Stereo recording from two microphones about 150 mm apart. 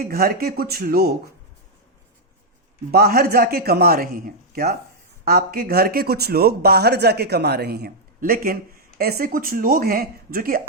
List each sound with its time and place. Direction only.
0.0 s speech: 85° right
2.9 s speech: 90° right
5.2 s speech: 90° right
9.0 s speech: 90° right